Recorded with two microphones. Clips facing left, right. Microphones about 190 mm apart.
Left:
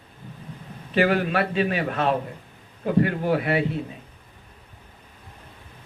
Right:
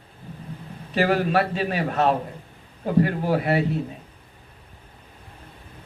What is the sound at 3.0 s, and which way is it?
Speech, 55° left (ahead or behind).